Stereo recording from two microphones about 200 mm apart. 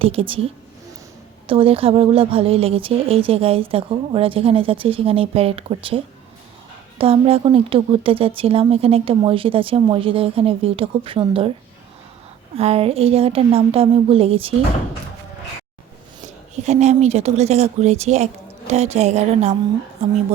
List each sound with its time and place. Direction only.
0.0 s speech: 30° right (ahead or behind)
7.0 s speech: 30° right (ahead or behind)
12.5 s speech: 30° right (ahead or behind)
16.6 s speech: 35° right (ahead or behind)